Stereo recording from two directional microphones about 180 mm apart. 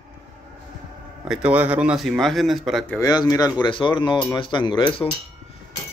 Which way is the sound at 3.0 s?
20° left (ahead or behind).